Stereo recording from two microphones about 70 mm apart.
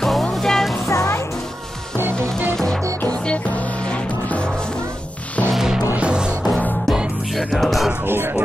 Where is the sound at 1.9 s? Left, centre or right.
Right.